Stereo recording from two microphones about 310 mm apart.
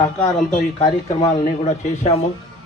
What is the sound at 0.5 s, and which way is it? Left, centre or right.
Speech, centre.